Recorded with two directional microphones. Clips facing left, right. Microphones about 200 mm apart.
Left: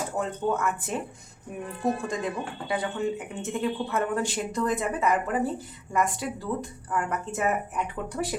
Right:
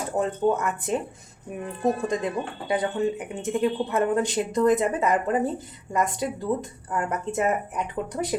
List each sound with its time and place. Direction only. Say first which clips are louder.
0.2 s speech: right 5 dB; 20° right (ahead or behind)